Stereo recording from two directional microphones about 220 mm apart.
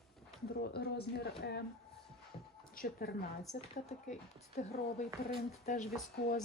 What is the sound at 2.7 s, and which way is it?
Speech, 40° left (ahead or behind).